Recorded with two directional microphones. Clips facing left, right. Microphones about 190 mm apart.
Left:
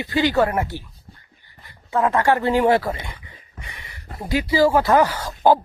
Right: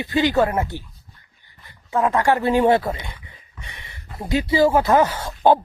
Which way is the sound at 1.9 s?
20° right (ahead or behind).